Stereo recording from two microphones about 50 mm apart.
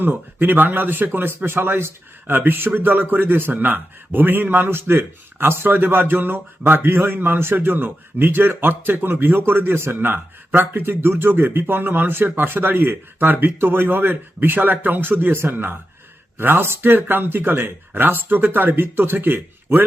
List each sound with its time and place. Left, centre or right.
0.0 s a man's voice: right
16.4 s a man's voice: right